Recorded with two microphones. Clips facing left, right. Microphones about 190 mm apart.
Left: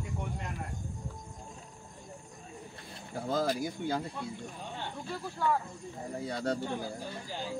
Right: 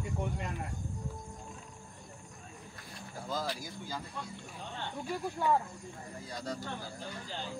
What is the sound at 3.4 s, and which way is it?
Speech, 45° left (ahead or behind).